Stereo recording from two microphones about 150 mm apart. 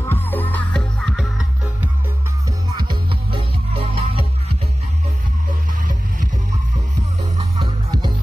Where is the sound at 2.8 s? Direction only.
30° right (ahead or behind).